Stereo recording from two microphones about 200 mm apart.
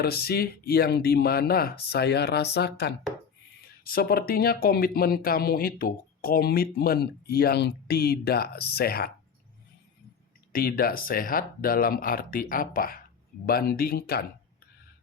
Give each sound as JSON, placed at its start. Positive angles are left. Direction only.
{"t": 0.0, "sound": "speech", "side_deg": 50}
{"t": 10.5, "sound": "speech", "side_deg": 45}